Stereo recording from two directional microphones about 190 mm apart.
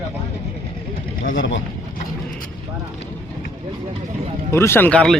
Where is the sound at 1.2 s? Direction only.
80° left.